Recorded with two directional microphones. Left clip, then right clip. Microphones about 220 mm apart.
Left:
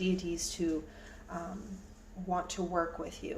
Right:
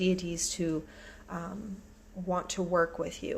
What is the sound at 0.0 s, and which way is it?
Speech, 50° right (ahead or behind).